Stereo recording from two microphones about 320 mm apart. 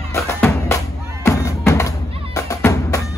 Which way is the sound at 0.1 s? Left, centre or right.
Centre.